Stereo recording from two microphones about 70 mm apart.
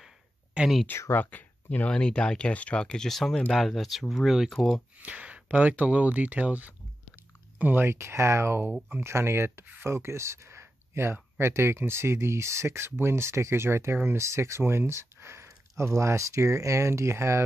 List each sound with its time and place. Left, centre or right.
0.8 s speech: left; by 4.8 s centre
4.9 s speech: centre; by 17.4 s right